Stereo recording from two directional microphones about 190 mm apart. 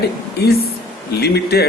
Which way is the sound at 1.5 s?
55° left (ahead or behind).